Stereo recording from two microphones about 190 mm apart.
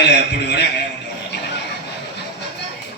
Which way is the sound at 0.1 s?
65° left (ahead or behind).